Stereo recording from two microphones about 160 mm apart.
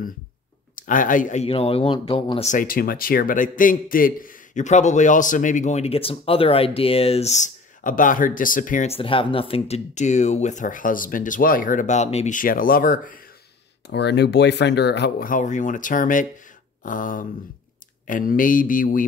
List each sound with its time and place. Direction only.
0.7 s speech: 55° left (ahead or behind)
1.5 s speech: 35° left (ahead or behind)
2.5 s a man's voice: 60° left (ahead or behind)
8.8 s a man's voice: 35° left (ahead or behind)
12.4 s speech: 60° left (ahead or behind)
13.8 s speech: 90° left; by 19.0 s 55° left (ahead or behind)